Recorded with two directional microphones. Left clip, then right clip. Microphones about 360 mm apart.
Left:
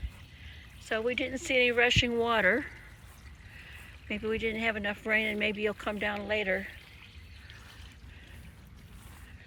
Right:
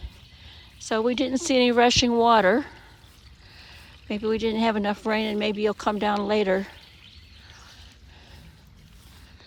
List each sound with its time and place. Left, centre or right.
0.9 s speech: centre
4.1 s speech: centre
6.4 s speech: right